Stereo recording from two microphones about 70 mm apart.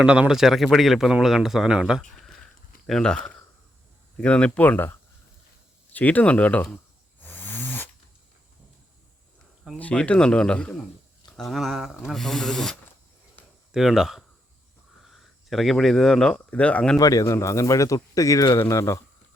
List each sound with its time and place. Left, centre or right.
0.0 s speech: centre
2.8 s speech: centre; by 4.9 s left
5.9 s speech: left
7.2 s a sound: left
9.7 s speech: centre
11.3 s speech: centre
13.7 s speech: centre
17.0 s a man's voice: left
17.2 s speech: left